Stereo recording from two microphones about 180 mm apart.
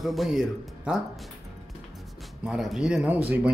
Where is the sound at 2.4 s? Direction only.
Centre (ahead or behind).